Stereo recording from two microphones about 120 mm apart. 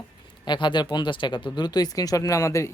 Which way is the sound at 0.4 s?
40° left (ahead or behind).